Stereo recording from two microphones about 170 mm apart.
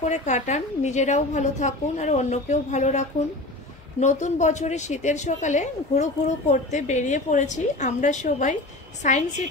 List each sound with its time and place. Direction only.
0.0 s a woman's voice: 45° left (ahead or behind)